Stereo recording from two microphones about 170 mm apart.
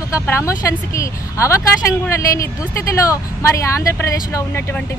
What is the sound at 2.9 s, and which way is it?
Speech, 20° left (ahead or behind).